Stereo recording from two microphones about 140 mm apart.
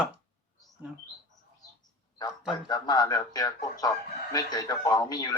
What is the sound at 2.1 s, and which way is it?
Speech, 30° left (ahead or behind).